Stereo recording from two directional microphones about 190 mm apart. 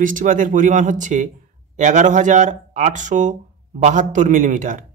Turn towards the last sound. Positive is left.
turn(degrees=-45)  # may be behind; listen again after turning